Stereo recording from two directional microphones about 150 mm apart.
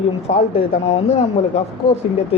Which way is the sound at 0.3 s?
45° left (ahead or behind).